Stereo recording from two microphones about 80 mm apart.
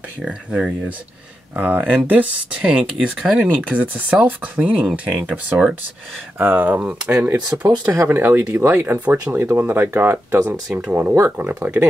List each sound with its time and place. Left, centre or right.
0.2 s speech: centre
1.6 s speech: right
6.3 s speech: right
7.9 s speech: right